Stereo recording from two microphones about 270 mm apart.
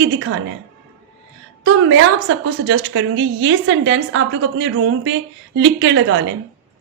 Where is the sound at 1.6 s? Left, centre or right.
Right.